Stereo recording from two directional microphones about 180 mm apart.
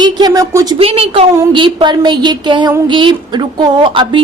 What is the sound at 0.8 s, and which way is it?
A woman's voice, 30° right (ahead or behind).